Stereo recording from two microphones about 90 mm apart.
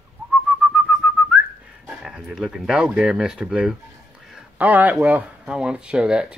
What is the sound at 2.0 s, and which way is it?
Speech, 5° right (ahead or behind).